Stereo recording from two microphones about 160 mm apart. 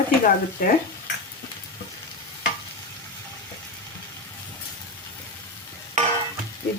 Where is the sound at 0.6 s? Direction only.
65° left (ahead or behind).